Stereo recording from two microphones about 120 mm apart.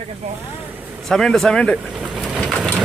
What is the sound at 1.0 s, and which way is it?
Speech, 5° left (ahead or behind).